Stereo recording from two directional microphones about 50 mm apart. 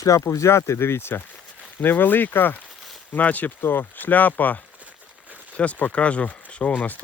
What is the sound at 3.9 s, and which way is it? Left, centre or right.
Speech, left.